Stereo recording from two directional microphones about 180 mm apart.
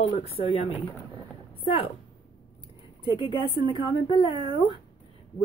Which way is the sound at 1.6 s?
30° left (ahead or behind).